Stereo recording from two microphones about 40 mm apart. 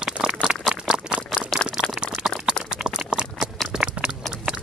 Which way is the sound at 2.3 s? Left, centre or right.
Centre.